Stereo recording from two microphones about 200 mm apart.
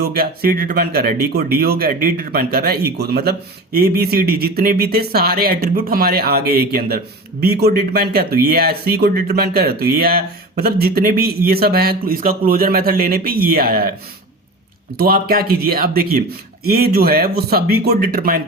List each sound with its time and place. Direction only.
0.0 s speech: 50° right (ahead or behind)
14.9 s speech: 45° right (ahead or behind)